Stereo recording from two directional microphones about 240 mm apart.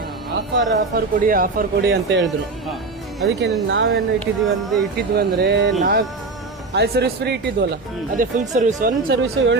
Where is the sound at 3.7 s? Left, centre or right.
Right.